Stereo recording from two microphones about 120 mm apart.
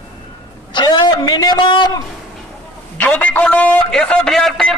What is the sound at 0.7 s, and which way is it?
Speech, 35° left (ahead or behind).